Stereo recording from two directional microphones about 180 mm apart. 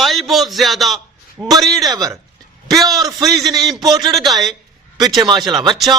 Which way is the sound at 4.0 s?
25° right (ahead or behind).